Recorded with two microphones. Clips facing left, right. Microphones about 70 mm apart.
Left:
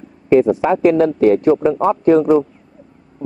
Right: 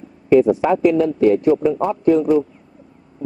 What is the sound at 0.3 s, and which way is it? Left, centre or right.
Speech, left.